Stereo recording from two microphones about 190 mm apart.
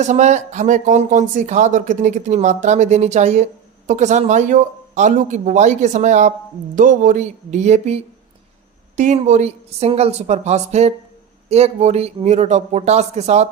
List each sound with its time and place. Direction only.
0.0 s speech: 40° right (ahead or behind)